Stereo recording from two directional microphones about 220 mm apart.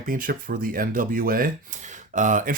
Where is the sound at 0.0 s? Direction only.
40° right (ahead or behind).